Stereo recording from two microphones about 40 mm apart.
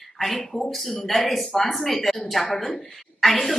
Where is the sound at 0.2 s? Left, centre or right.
Centre.